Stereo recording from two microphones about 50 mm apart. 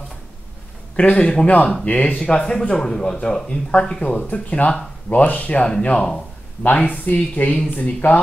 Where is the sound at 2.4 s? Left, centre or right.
Centre.